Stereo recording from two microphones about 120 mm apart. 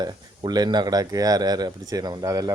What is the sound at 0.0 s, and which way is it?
A man's voice, 35° right (ahead or behind).